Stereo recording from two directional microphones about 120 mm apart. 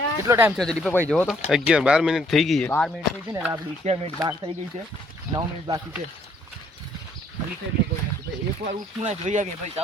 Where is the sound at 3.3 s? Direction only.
15° right (ahead or behind).